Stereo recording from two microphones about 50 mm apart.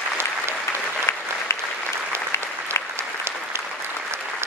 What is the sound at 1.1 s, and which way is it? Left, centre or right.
Applause, left.